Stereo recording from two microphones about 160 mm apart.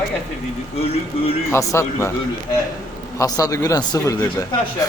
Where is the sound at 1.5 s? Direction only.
20° left (ahead or behind).